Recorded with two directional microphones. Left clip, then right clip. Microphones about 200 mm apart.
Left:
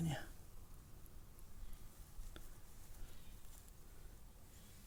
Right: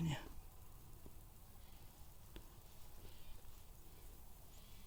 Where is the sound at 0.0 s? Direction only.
10° right (ahead or behind).